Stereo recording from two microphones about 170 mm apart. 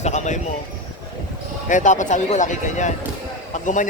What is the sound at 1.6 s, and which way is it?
Speech, 45° left (ahead or behind).